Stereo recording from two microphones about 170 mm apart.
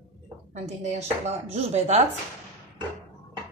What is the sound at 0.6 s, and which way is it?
Speech, 40° right (ahead or behind).